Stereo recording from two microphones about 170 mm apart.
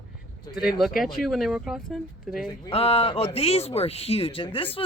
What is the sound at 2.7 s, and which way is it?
Speech, 35° left (ahead or behind).